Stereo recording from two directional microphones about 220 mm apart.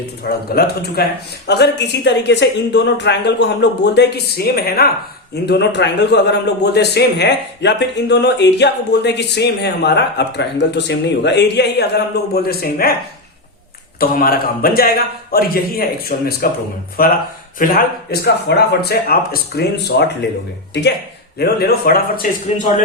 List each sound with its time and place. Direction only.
0.2 s a man's voice: 45° left (ahead or behind)
14.0 s a man's voice: 40° left (ahead or behind)
21.3 s a man's voice: 45° left (ahead or behind)